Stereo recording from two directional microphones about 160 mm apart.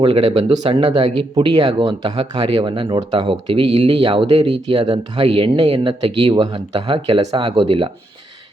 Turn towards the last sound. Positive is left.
turn(degrees=-35)  # may be behind; listen again after turning